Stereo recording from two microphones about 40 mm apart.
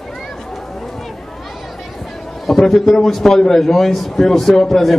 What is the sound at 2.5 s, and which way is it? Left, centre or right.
A man's voice, centre.